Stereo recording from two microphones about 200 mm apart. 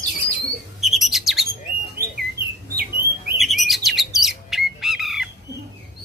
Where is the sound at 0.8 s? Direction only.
Centre (ahead or behind).